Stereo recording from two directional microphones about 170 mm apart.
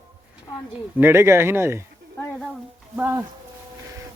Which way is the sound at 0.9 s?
15° right (ahead or behind).